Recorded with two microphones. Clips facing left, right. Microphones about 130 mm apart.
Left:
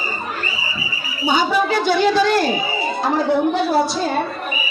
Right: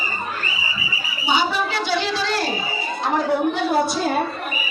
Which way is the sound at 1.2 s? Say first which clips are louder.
Left 4 dB; 45° left (ahead or behind).